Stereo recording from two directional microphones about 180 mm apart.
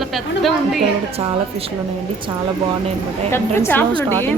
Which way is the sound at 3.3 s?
15° left (ahead or behind).